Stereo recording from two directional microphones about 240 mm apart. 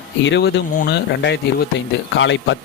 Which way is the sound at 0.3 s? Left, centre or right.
Left.